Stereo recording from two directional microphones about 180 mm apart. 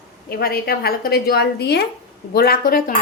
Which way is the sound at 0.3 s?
55° left (ahead or behind).